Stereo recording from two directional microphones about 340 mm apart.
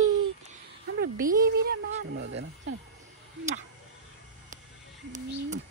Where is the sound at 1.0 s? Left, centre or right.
Right.